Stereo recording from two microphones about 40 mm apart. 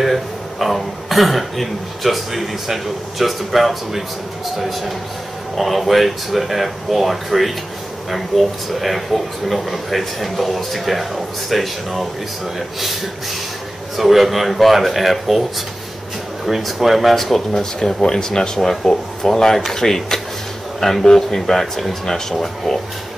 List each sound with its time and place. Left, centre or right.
0.0 s speech: centre
16.4 s speech: centre
17.5 s speech: centre